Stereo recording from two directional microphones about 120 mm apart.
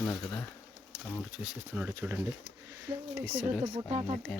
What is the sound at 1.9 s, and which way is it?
Speech, 25° right (ahead or behind).